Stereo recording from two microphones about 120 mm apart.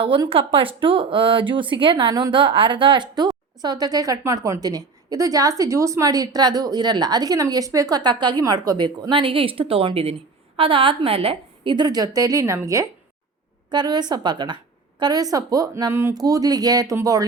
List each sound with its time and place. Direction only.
0.3 s a woman's voice: 50° right (ahead or behind); by 12.9 s 25° right (ahead or behind)
13.7 s a woman's voice: 35° right (ahead or behind); by 16.1 s 20° right (ahead or behind)
16.1 s a woman's voice: 30° right (ahead or behind)